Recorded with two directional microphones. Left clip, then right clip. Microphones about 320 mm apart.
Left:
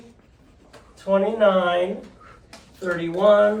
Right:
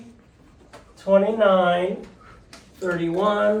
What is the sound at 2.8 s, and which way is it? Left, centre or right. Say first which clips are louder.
Speech: left 3 dB; centre.